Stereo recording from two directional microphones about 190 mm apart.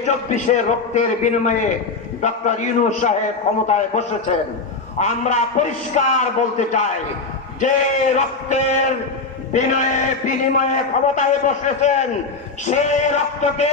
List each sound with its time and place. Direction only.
0.0 s a man's voice: 40° left (ahead or behind)
7.6 s a man's voice: 40° left (ahead or behind)